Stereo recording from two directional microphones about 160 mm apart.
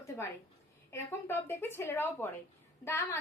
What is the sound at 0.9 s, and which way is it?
A woman's voice, 15° left (ahead or behind).